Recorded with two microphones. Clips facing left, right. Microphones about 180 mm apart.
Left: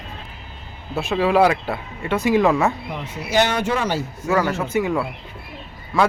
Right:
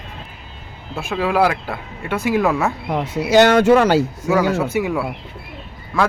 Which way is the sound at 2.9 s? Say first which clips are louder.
Right 8 dB; 85° right.